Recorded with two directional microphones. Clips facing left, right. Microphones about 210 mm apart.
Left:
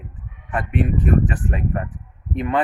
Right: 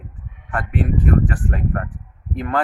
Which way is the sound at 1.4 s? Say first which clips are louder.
Even; 5° left (ahead or behind).